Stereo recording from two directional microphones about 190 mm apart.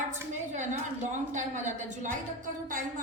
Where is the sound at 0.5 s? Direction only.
40° right (ahead or behind).